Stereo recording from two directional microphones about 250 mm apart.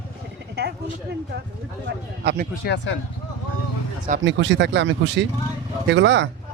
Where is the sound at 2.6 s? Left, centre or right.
Left.